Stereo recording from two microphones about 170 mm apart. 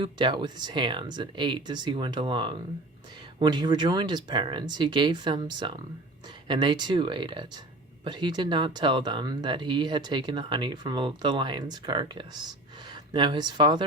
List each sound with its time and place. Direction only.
0.0 s speech: 25° right (ahead or behind)